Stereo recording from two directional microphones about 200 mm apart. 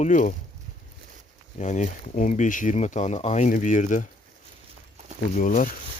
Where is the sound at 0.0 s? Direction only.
40° left (ahead or behind).